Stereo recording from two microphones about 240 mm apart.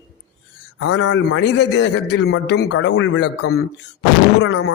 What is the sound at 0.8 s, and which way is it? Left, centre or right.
A man's voice, left.